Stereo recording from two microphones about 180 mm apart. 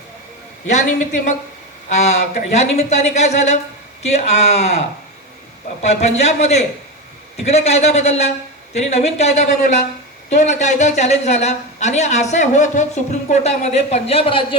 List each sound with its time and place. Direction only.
0.7 s a woman's voice: 40° left (ahead or behind)
5.8 s a woman's voice: 40° left (ahead or behind)